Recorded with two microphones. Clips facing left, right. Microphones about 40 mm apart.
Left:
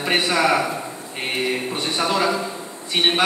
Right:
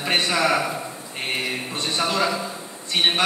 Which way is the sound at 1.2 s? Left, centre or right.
Centre.